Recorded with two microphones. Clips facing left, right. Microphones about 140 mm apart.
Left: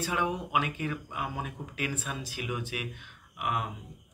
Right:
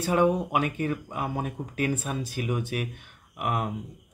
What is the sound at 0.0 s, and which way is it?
Speech, 45° right (ahead or behind).